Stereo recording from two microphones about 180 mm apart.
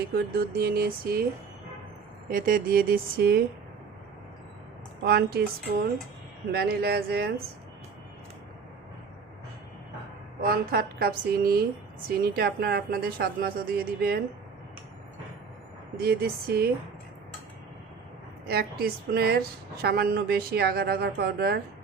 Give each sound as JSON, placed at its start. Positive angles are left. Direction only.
{"t": 0.0, "sound": "a woman's voice", "side_deg": -60}
{"t": 2.3, "sound": "a woman's voice", "side_deg": -50}
{"t": 5.0, "sound": "a woman's voice", "side_deg": -60}
{"t": 10.4, "sound": "a woman's voice", "side_deg": -60}
{"t": 16.0, "sound": "a woman's voice", "side_deg": -60}
{"t": 18.4, "sound": "a woman's voice", "side_deg": -60}